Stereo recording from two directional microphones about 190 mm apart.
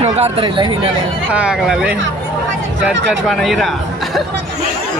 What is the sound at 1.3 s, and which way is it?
Speech, 5° right (ahead or behind).